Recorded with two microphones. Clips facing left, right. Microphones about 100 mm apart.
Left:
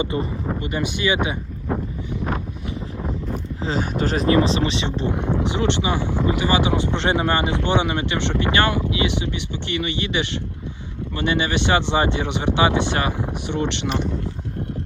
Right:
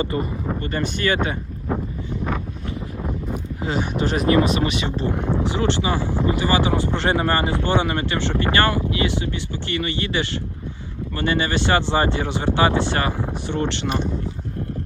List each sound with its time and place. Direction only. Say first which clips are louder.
0.0 s speech: even; 20° left (ahead or behind)
3.6 s speech: even; 35° left (ahead or behind); by 13.9 s 20° left (ahead or behind)